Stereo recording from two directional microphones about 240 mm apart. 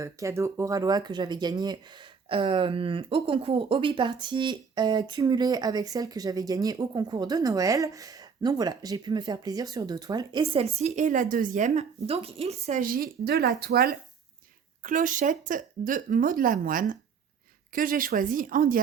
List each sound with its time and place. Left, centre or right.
0.0 s a woman's voice: centre; by 18.8 s right